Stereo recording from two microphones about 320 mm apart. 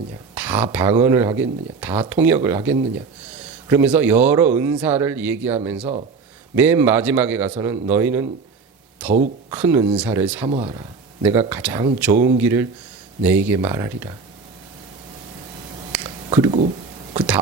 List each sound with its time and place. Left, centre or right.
0.3 s speech: centre
5.8 s speech: centre
6.6 s speech: centre
10.4 s speech: centre
15.9 s a sound: centre
17.2 s a sound: centre